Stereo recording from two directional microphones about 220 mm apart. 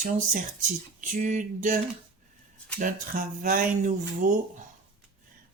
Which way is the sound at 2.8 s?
40° right (ahead or behind).